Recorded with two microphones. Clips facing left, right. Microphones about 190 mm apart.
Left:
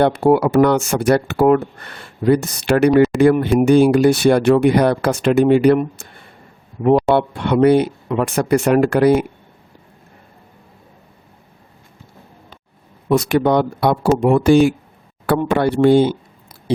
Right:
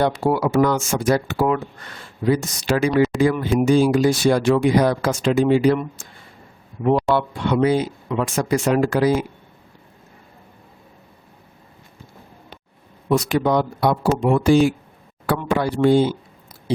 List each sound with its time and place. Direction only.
0.0 s speech: 60° left (ahead or behind)
13.1 s speech: 60° left (ahead or behind)